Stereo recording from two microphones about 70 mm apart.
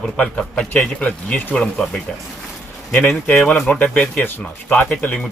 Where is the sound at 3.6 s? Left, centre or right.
Centre.